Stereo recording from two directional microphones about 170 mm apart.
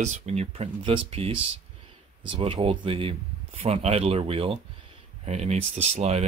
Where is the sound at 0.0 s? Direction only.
40° right (ahead or behind).